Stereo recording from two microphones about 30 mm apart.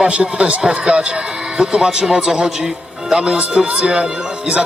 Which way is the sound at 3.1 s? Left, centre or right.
Right.